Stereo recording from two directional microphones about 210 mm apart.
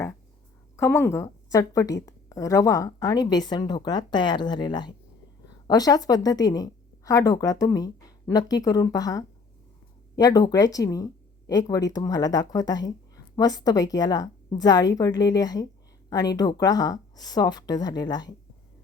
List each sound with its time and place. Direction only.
0.8 s a woman's voice: 10° left (ahead or behind)